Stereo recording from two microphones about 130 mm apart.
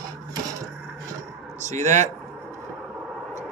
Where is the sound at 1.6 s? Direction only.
65° right (ahead or behind).